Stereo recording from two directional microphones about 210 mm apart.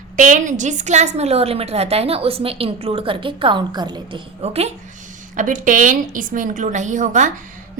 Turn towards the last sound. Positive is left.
turn(degrees=-35)  # may be behind; listen again after turning